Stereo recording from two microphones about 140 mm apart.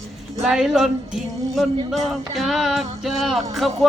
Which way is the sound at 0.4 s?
5° right (ahead or behind).